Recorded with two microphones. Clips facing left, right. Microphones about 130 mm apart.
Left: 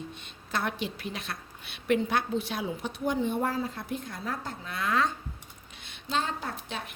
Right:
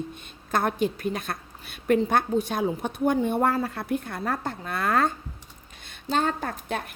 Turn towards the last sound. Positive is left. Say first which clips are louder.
# right 6 dB
turn(degrees=-50)  # may be behind; listen again after turning